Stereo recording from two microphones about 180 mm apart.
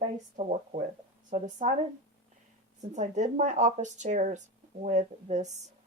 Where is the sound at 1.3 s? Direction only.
40° right (ahead or behind).